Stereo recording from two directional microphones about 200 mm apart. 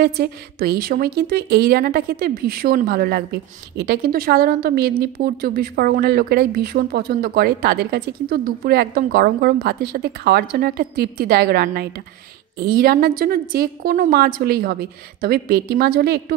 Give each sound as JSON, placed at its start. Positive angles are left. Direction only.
{"t": 0.0, "sound": "a woman's voice", "side_deg": -50}